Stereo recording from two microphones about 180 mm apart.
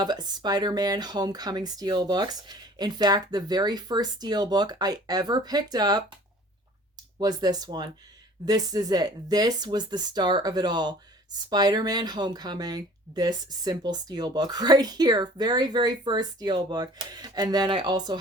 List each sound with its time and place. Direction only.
0.0 s speech: 25° right (ahead or behind)
7.2 s speech: 20° right (ahead or behind)